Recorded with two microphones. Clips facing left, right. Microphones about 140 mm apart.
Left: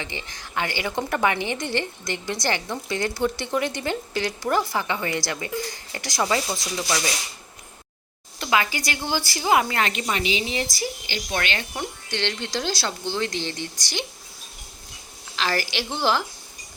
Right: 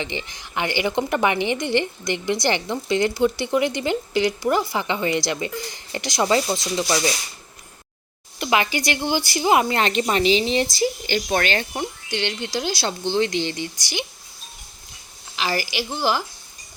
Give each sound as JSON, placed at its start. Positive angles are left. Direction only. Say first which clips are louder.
{"t": 0.0, "sound": "a woman's voice", "louder": "right 5 dB", "side_deg": -20}
{"t": 8.4, "sound": "a woman's voice", "louder": "right 2 dB", "side_deg": -20}
{"t": 11.0, "sound": "speech", "louder": "right 6 dB", "side_deg": -50}
{"t": 11.7, "sound": "a woman's voice", "louder": "right 3 dB", "side_deg": -15}
{"t": 15.4, "sound": "a woman's voice", "louder": "right 1 dB", "side_deg": -10}